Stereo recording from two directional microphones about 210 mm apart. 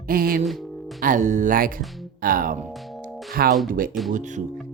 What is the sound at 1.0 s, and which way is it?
Speech, 40° right (ahead or behind).